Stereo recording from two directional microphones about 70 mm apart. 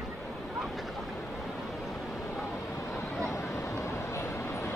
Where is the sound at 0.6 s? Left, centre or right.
Centre.